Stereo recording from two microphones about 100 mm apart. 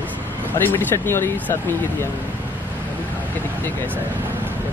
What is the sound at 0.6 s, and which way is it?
Speech, 20° left (ahead or behind).